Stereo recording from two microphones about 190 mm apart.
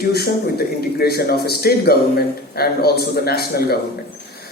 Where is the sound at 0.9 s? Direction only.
55° left (ahead or behind).